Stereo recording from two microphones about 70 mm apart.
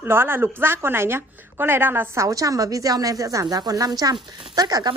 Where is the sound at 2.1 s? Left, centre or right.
Right.